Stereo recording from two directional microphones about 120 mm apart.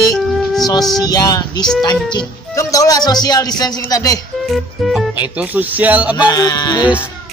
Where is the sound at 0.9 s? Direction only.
30° left (ahead or behind).